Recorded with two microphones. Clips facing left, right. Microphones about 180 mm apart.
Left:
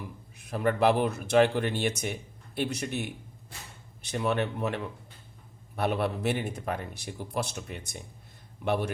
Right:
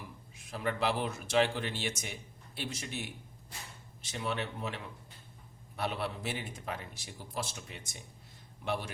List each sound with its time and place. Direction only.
0.3 s a man's voice: 60° left (ahead or behind)